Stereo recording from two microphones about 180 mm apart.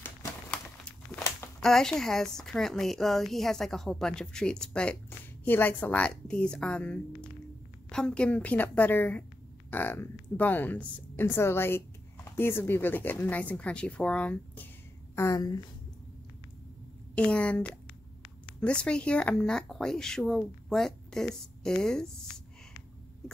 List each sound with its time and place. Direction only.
1.6 s a woman's voice: 5° left (ahead or behind)
17.1 s speech: 5° left (ahead or behind)